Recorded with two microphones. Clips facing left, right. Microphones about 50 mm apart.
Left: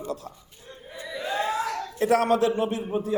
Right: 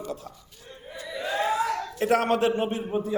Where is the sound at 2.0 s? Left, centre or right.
Right.